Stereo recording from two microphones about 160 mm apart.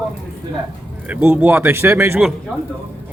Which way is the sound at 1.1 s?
10° right (ahead or behind).